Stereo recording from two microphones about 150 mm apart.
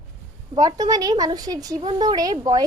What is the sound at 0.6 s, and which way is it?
Speech, 25° right (ahead or behind).